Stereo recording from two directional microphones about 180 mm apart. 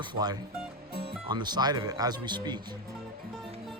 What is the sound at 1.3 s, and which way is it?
Speech, 25° right (ahead or behind).